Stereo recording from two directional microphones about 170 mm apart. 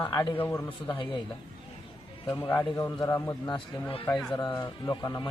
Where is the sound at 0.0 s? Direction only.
20° left (ahead or behind).